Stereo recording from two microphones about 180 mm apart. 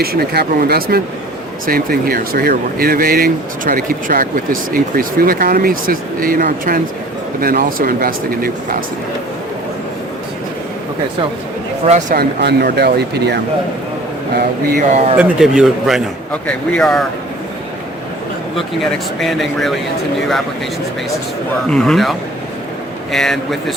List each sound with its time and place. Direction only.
0.0 s speech: 60° right (ahead or behind)
11.9 s speech: 45° right (ahead or behind); by 13.4 s 65° right (ahead or behind)
14.3 s speech: 55° right (ahead or behind)
15.2 s speech: 5° right (ahead or behind)
19.2 s speech: centre (ahead or behind)
21.7 s speech: centre (ahead or behind)
23.1 s speech: centre (ahead or behind)